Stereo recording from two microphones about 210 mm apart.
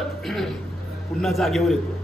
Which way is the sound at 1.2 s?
Centre (ahead or behind).